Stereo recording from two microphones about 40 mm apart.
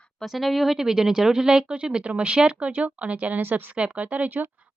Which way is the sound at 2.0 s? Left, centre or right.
Right.